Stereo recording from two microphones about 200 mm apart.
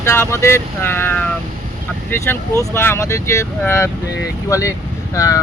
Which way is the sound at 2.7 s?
10° left (ahead or behind).